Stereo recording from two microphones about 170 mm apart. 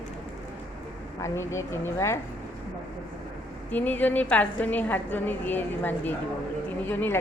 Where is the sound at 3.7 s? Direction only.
10° left (ahead or behind).